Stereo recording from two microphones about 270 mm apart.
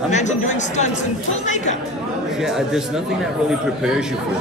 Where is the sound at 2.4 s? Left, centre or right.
Centre.